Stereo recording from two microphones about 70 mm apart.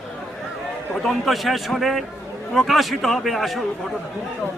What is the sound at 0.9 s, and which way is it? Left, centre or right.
A man's voice, centre.